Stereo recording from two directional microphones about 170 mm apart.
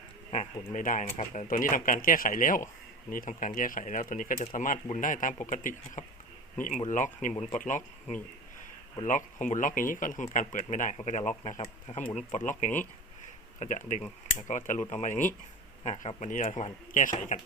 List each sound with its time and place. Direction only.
0.3 s speech: 45° left (ahead or behind)
9.0 s speech: 45° left (ahead or behind)